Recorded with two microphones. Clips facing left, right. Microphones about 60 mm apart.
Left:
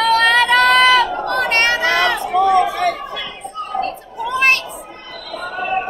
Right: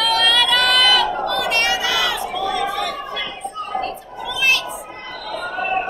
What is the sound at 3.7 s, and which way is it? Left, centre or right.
Chatter, left.